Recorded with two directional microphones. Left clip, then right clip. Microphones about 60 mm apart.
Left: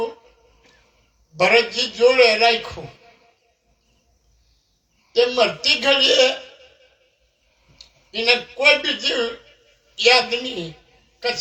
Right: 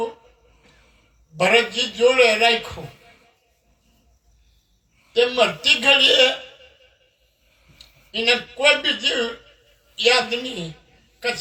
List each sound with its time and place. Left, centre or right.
1.4 s a man's voice: left
5.1 s a man's voice: left
5.9 s a woman's voice: left
8.1 s a man's voice: left